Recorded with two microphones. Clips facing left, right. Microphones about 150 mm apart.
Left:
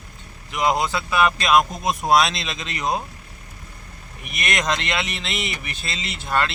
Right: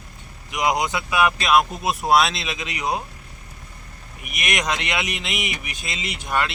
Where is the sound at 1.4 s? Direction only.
5° right (ahead or behind).